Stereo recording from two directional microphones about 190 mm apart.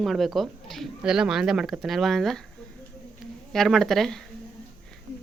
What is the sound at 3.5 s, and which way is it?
Speech, centre (ahead or behind).